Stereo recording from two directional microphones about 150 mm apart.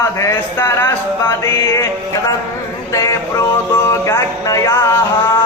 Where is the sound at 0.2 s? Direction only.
15° left (ahead or behind).